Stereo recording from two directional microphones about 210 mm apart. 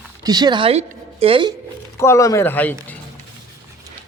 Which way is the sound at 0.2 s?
20° right (ahead or behind).